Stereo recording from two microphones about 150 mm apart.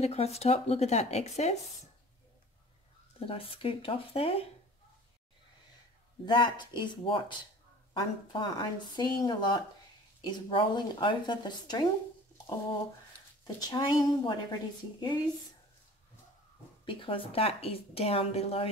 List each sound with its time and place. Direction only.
0.0 s speech: 45° left (ahead or behind)
3.2 s a woman's voice: 40° left (ahead or behind)
6.2 s a woman's voice: 30° left (ahead or behind)
13.4 s a woman's voice: 25° left (ahead or behind)
16.8 s a woman's voice: 35° left (ahead or behind)